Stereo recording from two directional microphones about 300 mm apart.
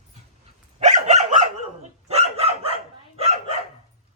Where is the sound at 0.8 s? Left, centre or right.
Right.